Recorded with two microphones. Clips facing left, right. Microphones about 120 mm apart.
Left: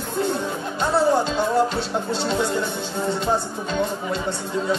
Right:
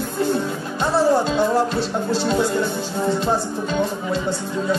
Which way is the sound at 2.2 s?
Centre (ahead or behind).